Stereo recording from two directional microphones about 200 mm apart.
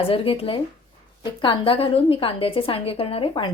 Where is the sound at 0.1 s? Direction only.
30° left (ahead or behind).